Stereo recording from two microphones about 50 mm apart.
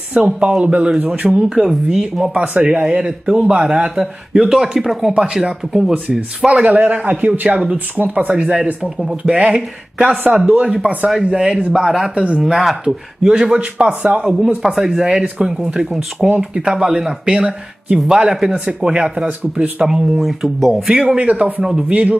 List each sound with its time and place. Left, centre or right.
0.1 s speech: centre
1.6 s speech: centre
20.2 s speech: centre
20.9 s speech: centre